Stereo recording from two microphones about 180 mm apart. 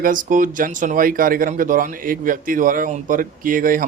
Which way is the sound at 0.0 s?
50° right (ahead or behind).